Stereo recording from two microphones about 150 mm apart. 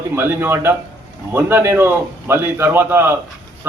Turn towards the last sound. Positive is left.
turn(degrees=-15)  # may be behind; listen again after turning